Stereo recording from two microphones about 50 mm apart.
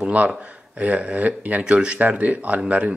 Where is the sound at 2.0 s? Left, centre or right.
Right.